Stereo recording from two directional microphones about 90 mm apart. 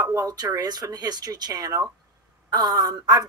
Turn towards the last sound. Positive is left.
turn(degrees=-45)  # may be behind; listen again after turning